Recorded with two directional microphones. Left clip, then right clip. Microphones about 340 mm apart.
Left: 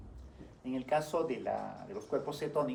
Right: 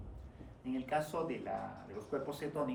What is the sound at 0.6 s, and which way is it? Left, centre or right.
Speech, left.